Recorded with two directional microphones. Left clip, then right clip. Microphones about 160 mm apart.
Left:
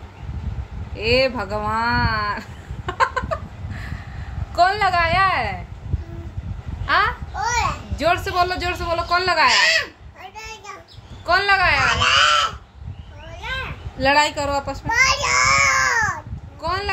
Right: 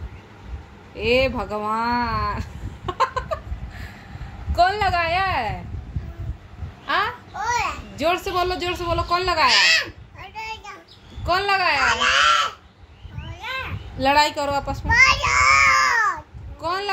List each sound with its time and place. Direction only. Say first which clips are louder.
0.9 s a man's voice: left 1 dB; 20° right (ahead or behind)
2.9 s a sound: left 2 dB; 20° right (ahead or behind)
4.6 s a man's voice: left 2 dB; 15° right (ahead or behind)
6.9 s a man's voice: left 4 dB; 20° right (ahead or behind)
9.5 s speech: even; 25° left (ahead or behind)
11.2 s speech: left 3 dB; 20° right (ahead or behind)
13.9 s a man's voice: left 1 dB; 25° right (ahead or behind)
14.9 s a sound: right 2 dB; centre (ahead or behind)
16.6 s a man's voice: left 1 dB; 20° right (ahead or behind)